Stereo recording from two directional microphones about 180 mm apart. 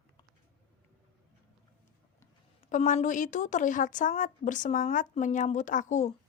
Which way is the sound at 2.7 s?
45° left (ahead or behind).